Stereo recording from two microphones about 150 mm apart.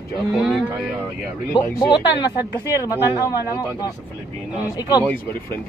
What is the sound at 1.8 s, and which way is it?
Speech, 25° left (ahead or behind).